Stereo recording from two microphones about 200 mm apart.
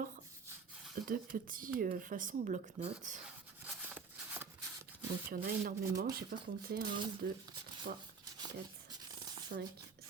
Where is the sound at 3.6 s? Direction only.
10° right (ahead or behind).